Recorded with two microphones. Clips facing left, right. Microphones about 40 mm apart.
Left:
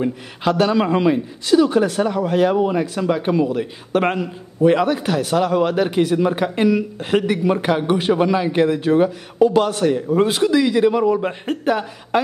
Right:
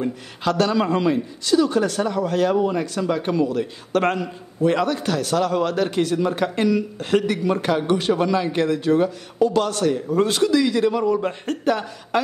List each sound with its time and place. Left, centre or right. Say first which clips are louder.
0.0 s a man's voice: left 3 dB; centre